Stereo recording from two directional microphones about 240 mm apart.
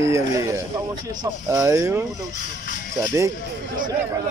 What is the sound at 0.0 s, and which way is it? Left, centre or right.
Speech, centre.